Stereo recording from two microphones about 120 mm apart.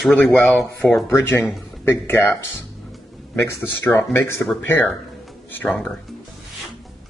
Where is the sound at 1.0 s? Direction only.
20° left (ahead or behind).